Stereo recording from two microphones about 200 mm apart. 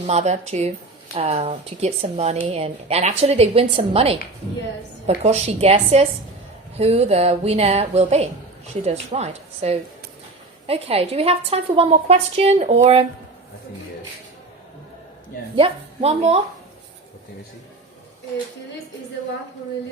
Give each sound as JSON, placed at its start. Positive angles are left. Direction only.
{"t": 0.1, "sound": "a woman's voice", "side_deg": -35}
{"t": 15.5, "sound": "a woman's voice", "side_deg": -30}